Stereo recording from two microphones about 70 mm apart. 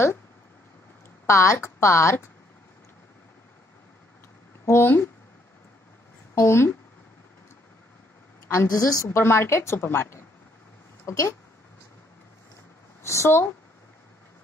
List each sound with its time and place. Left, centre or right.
1.2 s speech: left
4.6 s a woman's voice: left
6.3 s a woman's voice: left
8.6 s a woman's voice: left
9.1 s a woman's voice: left
13.0 s a woman's voice: left